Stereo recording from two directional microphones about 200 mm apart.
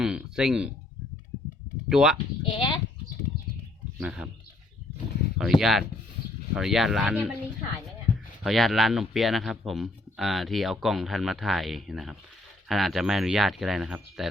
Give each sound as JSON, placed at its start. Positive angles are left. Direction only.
{"t": 0.0, "sound": "speech", "side_deg": -5}
{"t": 1.9, "sound": "speech", "side_deg": -5}
{"t": 2.4, "sound": "a sound", "side_deg": 25}
{"t": 3.9, "sound": "speech", "side_deg": -5}
{"t": 5.4, "sound": "speech", "side_deg": 0}
{"t": 8.4, "sound": "speech", "side_deg": 0}